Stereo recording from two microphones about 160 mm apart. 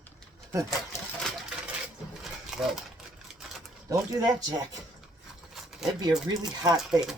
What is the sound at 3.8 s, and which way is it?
Speech, 20° right (ahead or behind).